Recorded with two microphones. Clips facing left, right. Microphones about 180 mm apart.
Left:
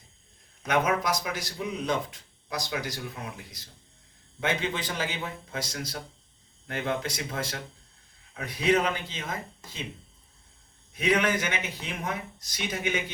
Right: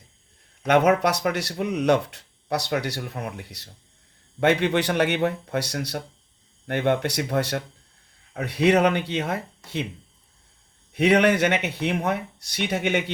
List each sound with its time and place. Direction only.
0.6 s speech: 65° right (ahead or behind)
10.9 s speech: 65° right (ahead or behind)